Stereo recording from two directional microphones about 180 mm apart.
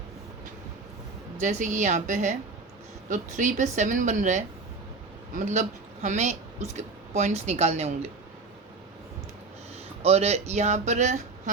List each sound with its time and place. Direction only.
1.4 s a woman's voice: 45° right (ahead or behind)
10.0 s speech: 35° right (ahead or behind)